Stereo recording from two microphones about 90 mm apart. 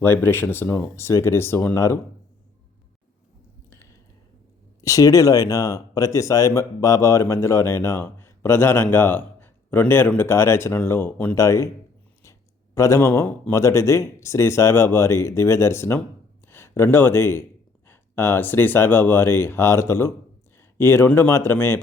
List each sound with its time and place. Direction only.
0.0 s speech: 25° left (ahead or behind)
4.8 s speech: 40° left (ahead or behind); by 11.3 s 20° left (ahead or behind)
11.3 s speech: 35° left (ahead or behind)
12.7 s speech: 35° left (ahead or behind)